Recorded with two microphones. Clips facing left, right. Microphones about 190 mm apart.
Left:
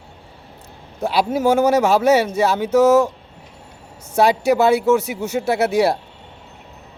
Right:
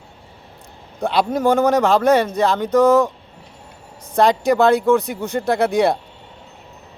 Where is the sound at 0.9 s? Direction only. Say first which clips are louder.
Even; 5° left (ahead or behind).